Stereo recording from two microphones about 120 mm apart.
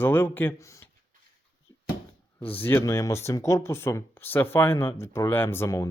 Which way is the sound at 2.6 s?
20° left (ahead or behind).